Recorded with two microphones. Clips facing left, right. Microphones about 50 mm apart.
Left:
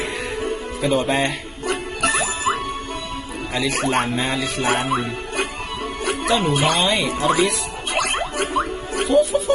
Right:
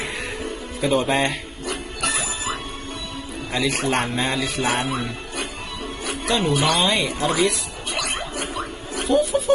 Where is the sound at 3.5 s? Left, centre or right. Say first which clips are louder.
Left 1 dB; centre.